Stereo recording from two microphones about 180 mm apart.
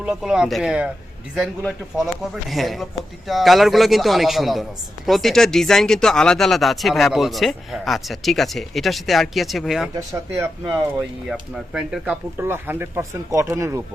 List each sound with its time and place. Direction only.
0.0 s speech: 5° right (ahead or behind)
9.9 s speech: 15° right (ahead or behind)
10.7 s speech: centre (ahead or behind)